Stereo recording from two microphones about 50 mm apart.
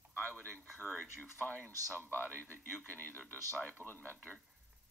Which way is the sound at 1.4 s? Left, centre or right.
Left.